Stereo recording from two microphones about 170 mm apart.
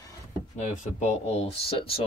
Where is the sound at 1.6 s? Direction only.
35° left (ahead or behind).